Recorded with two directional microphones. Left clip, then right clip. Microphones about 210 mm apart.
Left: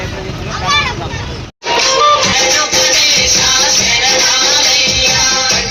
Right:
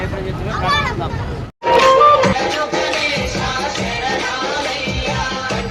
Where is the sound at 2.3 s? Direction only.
50° right (ahead or behind).